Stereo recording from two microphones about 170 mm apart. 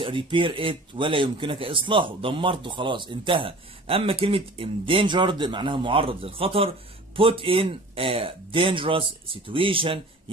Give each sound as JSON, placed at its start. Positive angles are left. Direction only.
{"t": 0.0, "sound": "speech", "side_deg": -30}